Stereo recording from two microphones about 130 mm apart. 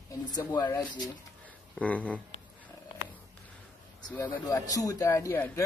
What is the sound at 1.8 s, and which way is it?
Speech, 10° left (ahead or behind).